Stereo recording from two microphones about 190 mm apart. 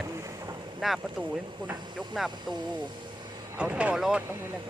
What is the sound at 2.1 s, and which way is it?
Speech, centre (ahead or behind).